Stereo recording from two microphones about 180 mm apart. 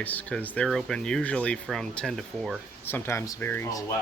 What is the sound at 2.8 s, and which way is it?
Speech, 10° left (ahead or behind).